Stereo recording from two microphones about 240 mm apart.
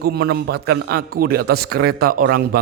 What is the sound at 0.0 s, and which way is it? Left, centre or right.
A man's voice, right.